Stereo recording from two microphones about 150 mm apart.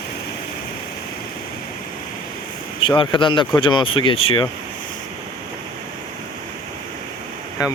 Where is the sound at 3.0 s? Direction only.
35° left (ahead or behind).